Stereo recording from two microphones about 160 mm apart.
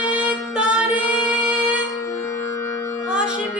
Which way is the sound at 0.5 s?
5° right (ahead or behind).